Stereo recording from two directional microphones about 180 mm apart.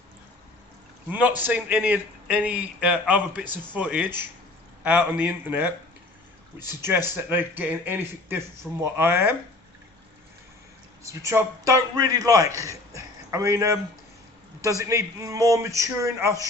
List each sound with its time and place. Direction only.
1.1 s a man's voice: 10° right (ahead or behind)
7.2 s a man's voice: 10° right (ahead or behind)
11.0 s a man's voice: 15° right (ahead or behind)